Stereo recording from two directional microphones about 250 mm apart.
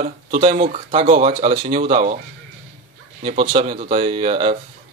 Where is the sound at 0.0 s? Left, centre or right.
Right.